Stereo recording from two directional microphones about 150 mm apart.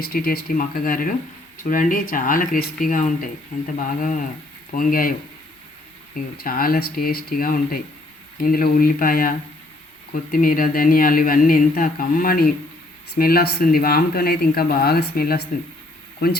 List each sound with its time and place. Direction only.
0.1 s speech: 85° left; by 5.1 s 70° left (ahead or behind)
6.1 s speech: 75° left (ahead or behind)
10.3 s speech: 70° left (ahead or behind)
13.1 s speech: 90° left